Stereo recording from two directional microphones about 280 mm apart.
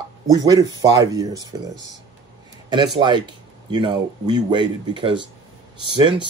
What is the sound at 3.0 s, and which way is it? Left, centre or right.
Speech, centre.